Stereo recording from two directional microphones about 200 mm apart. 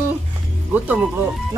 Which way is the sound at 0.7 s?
5° right (ahead or behind).